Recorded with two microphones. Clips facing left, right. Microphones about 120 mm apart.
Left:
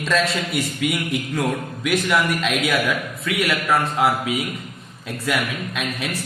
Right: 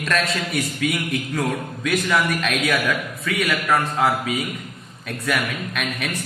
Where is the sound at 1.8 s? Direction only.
Centre (ahead or behind).